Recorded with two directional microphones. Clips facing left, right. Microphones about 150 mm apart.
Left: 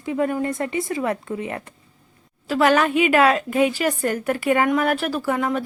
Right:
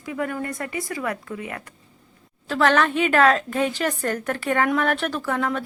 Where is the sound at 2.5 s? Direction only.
10° left (ahead or behind).